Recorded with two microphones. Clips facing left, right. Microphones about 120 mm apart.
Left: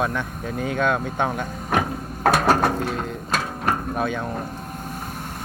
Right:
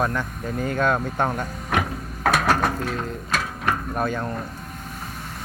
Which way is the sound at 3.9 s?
Centre (ahead or behind).